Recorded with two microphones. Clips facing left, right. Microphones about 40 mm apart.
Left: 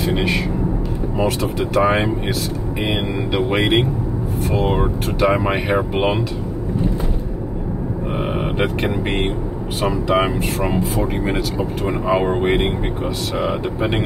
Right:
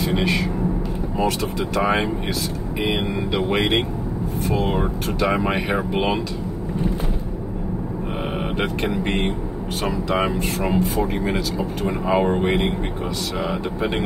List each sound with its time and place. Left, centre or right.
0.0 s a sound: centre
1.1 s speech: centre
8.2 s a sound: centre
8.9 s speech: centre
9.8 s speech: left
10.4 s speech: centre
11.5 s speech: centre